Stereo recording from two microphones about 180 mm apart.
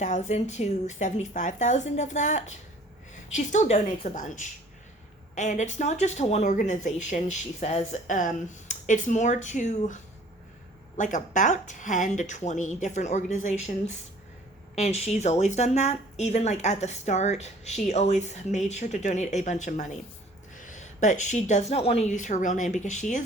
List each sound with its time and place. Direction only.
0.0 s a woman's voice: 40° left (ahead or behind)